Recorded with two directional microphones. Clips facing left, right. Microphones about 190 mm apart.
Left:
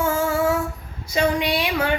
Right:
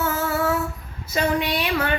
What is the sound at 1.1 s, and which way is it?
Speech, 10° left (ahead or behind).